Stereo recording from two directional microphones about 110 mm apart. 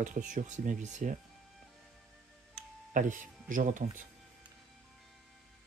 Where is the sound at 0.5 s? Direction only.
90° right.